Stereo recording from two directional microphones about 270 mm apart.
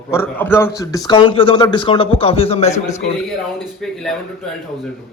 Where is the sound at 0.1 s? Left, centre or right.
Centre.